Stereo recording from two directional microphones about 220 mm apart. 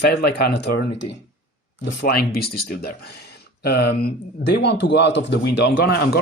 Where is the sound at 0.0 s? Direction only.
45° left (ahead or behind).